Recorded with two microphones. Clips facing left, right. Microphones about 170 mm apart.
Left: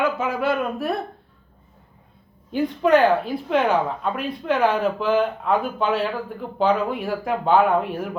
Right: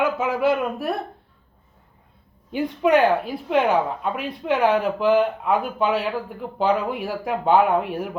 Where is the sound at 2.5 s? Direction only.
15° right (ahead or behind).